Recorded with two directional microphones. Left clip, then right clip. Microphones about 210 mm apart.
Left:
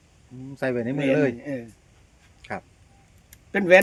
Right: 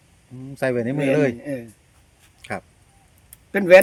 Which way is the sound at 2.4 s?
30° right (ahead or behind).